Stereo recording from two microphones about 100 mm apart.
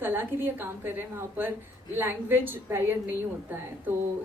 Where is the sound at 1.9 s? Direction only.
20° right (ahead or behind).